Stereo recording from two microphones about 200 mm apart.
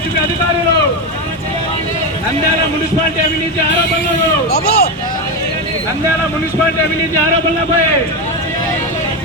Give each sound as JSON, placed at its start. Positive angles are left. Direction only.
{"t": 4.5, "sound": "speech", "side_deg": 50}